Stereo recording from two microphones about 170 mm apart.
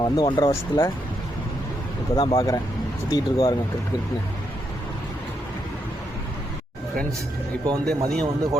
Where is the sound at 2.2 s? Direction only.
30° left (ahead or behind).